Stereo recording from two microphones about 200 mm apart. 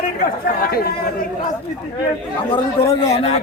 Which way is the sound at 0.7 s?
50° left (ahead or behind).